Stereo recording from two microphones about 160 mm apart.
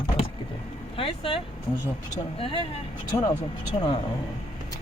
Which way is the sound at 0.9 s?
35° left (ahead or behind).